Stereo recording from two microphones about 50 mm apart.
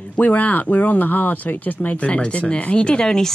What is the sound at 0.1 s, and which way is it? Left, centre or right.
Speech, left.